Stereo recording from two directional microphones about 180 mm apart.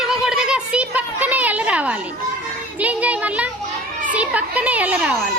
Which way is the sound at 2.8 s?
10° right (ahead or behind).